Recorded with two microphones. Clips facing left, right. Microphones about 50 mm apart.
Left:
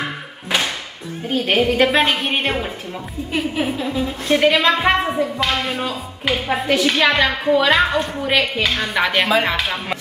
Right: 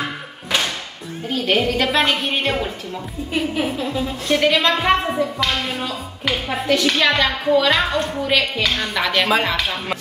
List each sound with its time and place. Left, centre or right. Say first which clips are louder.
1.3 s a woman's voice: left 2 dB; centre
3.5 s a woman's voice: left 1 dB; centre